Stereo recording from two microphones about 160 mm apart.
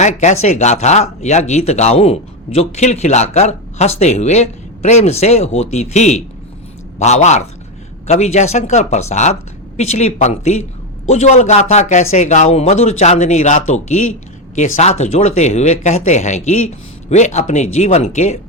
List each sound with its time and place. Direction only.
0.0 s speech: 45° left (ahead or behind)